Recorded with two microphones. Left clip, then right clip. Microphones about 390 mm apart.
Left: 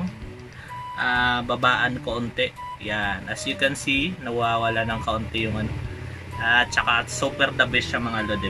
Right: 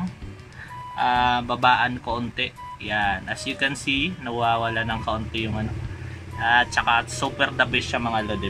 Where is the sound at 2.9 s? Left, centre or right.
Centre.